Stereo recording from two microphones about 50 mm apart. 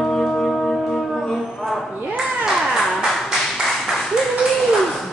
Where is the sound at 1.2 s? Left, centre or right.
Centre.